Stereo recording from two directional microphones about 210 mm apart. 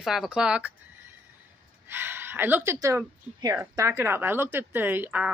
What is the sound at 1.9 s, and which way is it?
A woman's voice, 10° right (ahead or behind).